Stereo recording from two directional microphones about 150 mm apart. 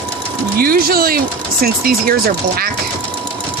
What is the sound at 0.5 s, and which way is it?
Speech, 85° right.